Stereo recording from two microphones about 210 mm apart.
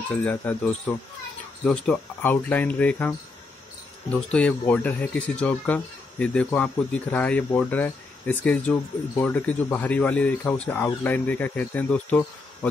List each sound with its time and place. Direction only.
0.2 s speech: 5° left (ahead or behind)